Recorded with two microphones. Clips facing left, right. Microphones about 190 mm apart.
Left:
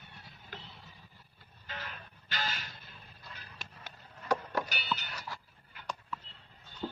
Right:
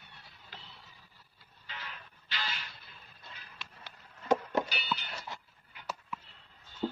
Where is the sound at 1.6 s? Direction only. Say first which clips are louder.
Left 3 dB; 45° left (ahead or behind).